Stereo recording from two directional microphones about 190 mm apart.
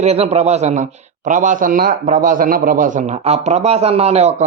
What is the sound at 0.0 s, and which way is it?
Speech, 35° right (ahead or behind).